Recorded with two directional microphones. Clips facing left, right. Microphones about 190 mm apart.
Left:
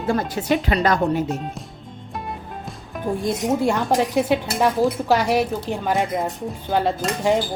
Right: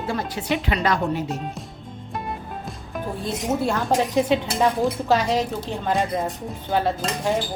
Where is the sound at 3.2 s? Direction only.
15° left (ahead or behind).